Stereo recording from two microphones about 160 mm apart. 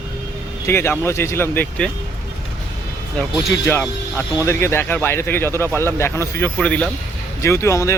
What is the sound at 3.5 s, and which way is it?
Speech, 15° left (ahead or behind).